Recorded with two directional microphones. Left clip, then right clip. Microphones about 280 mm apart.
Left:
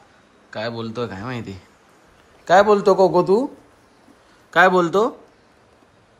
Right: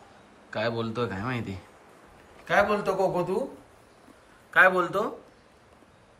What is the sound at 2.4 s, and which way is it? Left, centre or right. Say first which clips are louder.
Speech: left 10 dB; centre.